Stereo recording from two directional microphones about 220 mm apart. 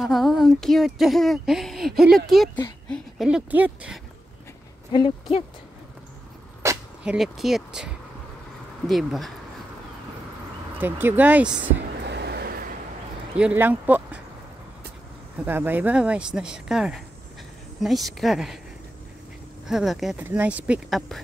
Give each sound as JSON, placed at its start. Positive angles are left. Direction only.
{"t": 0.0, "sound": "speech", "side_deg": 0}
{"t": 4.9, "sound": "speech", "side_deg": 20}
{"t": 6.6, "sound": "speech", "side_deg": -10}
{"t": 10.8, "sound": "speech", "side_deg": -10}
{"t": 12.0, "sound": "a sound", "side_deg": -50}
{"t": 13.4, "sound": "speech", "side_deg": -5}
{"t": 15.3, "sound": "speech", "side_deg": -10}
{"t": 19.7, "sound": "speech", "side_deg": 0}